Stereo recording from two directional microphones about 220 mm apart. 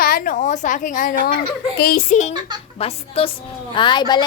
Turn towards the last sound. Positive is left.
turn(degrees=20)  # may be behind; listen again after turning